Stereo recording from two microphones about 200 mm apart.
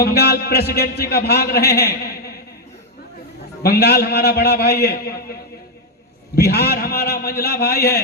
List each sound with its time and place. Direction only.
0.0 s a man's voice: 55° left (ahead or behind)
3.6 s a man's voice: 55° left (ahead or behind)